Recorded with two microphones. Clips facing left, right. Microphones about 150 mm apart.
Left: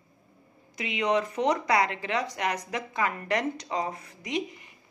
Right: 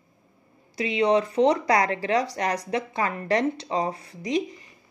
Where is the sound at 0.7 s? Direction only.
35° right (ahead or behind).